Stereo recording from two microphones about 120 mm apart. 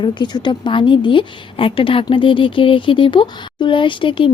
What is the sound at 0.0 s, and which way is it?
A woman's voice, 40° left (ahead or behind).